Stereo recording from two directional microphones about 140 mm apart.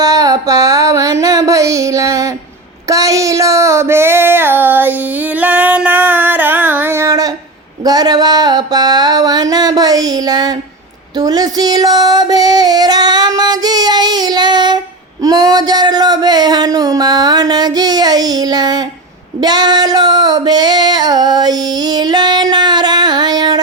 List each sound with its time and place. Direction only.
0.0 s a sound: 25° right (ahead or behind)
2.8 s female singing: 25° right (ahead or behind)
7.9 s music: 30° right (ahead or behind)
11.2 s female singing: 30° right (ahead or behind)
15.2 s a sound: 30° right (ahead or behind)
19.4 s female singing: 30° right (ahead or behind)